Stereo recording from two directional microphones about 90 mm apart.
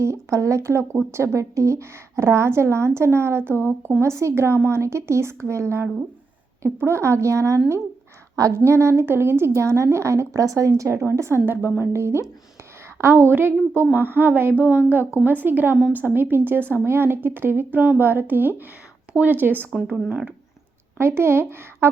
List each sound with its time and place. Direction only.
0.0 s speech: 35° right (ahead or behind)
19.7 s speech: 10° right (ahead or behind)
21.0 s speech: 25° right (ahead or behind)